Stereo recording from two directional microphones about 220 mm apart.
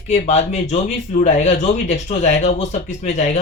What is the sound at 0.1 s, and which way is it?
Speech, 30° left (ahead or behind).